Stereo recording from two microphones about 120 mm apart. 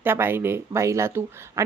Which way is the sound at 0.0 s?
20° right (ahead or behind).